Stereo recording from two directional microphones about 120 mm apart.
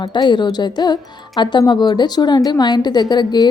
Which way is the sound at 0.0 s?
40° left (ahead or behind).